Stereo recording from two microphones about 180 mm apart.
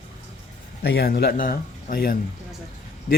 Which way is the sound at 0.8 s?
60° left (ahead or behind).